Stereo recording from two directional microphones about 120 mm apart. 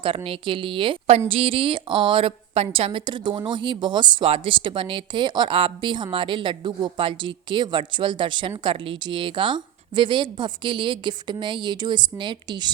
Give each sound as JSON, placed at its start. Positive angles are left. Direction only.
{"t": 0.0, "sound": "a woman's voice", "side_deg": -45}